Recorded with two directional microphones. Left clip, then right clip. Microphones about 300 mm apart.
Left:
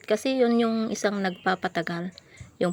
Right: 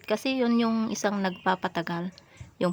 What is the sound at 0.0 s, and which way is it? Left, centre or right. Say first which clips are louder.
Speech: left 4 dB; centre.